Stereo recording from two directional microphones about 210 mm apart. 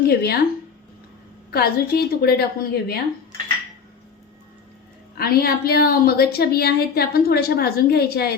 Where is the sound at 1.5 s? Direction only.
45° left (ahead or behind).